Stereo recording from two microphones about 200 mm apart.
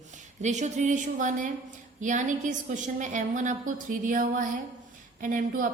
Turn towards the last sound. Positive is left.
turn(degrees=-40)  # may be behind; listen again after turning